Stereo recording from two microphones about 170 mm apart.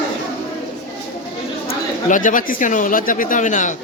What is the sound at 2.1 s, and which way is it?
Speech, 50° left (ahead or behind).